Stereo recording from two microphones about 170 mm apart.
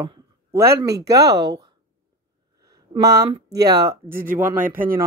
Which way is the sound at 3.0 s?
20° right (ahead or behind).